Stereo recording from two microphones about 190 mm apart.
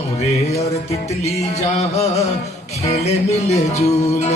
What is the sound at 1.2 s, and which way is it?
Music, 35° left (ahead or behind).